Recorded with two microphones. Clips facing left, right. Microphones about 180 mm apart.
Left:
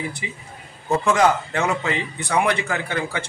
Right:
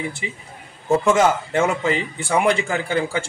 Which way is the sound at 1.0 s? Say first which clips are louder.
Left 1 dB; 25° right (ahead or behind).